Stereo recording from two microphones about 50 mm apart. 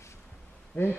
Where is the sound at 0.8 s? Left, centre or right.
Left.